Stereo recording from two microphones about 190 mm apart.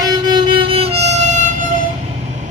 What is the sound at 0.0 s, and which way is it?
Music, 25° right (ahead or behind).